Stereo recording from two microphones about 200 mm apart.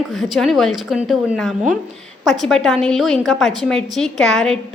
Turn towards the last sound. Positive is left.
turn(degrees=0)  # may be behind; listen again after turning